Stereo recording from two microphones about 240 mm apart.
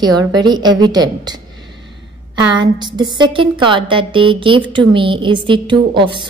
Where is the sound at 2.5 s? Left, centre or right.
Centre.